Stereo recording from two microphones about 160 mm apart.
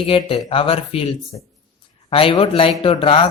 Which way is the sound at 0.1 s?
35° left (ahead or behind).